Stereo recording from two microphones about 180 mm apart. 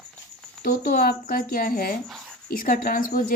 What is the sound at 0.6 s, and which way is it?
Speech, 55° left (ahead or behind).